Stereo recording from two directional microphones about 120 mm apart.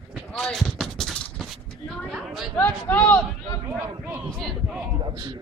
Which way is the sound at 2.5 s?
15° left (ahead or behind).